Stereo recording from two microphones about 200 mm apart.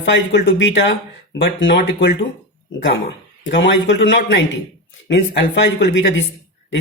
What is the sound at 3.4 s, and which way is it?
A man's voice, 65° left (ahead or behind).